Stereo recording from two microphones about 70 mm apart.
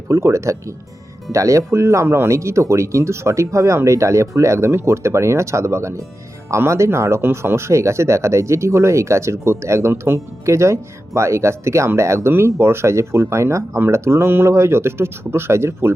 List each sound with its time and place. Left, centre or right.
0.1 s speech: right